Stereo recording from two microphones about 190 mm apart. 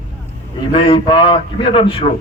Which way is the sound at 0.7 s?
30° left (ahead or behind).